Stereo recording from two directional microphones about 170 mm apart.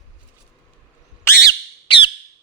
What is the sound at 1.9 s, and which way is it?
Squawk, 30° left (ahead or behind).